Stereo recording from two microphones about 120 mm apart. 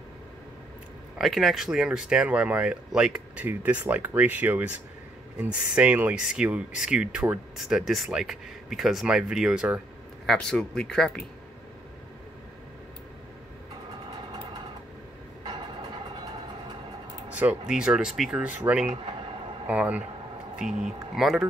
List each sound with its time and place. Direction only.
1.1 s speech: centre (ahead or behind)
10.2 s speech: 5° left (ahead or behind)
17.3 s speech: 10° right (ahead or behind)